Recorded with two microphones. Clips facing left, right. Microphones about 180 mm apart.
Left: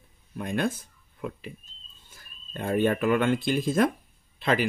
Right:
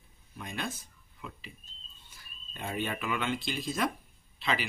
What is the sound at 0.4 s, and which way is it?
Speech, 55° left (ahead or behind).